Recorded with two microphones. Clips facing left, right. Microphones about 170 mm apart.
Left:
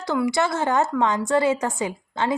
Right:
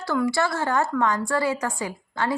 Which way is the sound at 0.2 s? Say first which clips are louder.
Left 1 dB; 20° left (ahead or behind).